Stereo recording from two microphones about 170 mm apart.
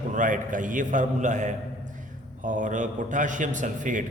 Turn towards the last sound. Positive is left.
turn(degrees=-50)  # may be behind; listen again after turning